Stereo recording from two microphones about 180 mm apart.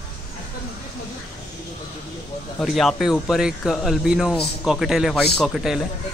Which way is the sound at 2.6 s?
Centre (ahead or behind).